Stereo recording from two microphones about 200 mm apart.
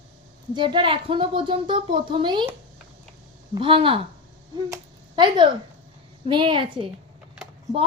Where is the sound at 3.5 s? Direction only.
25° right (ahead or behind).